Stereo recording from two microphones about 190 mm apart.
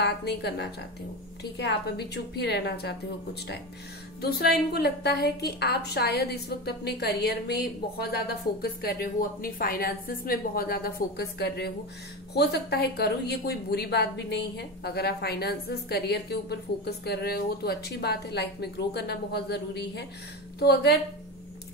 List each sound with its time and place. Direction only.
0.0 s a woman's voice: 60° left (ahead or behind)
4.2 s a woman's voice: 55° left (ahead or behind)